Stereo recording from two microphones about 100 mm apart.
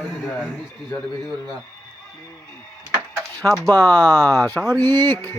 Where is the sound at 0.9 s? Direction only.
5° left (ahead or behind).